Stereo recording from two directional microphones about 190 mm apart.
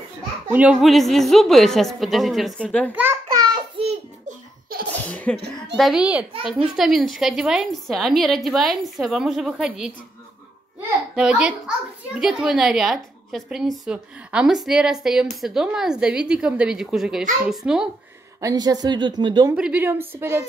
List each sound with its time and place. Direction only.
0.5 s a woman's voice: 5° right (ahead or behind)
2.9 s speech: 10° right (ahead or behind)
3.3 s a sound: 20° right (ahead or behind)
5.1 s sneeze: 5° left (ahead or behind)
5.8 s a woman's voice: 5° right (ahead or behind)
11.1 s a woman's voice: 5° right (ahead or behind)
18.4 s a woman's voice: 20° right (ahead or behind)
19.5 s speech: 5° right (ahead or behind)